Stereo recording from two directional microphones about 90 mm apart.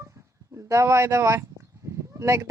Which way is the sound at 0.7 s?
35° right (ahead or behind).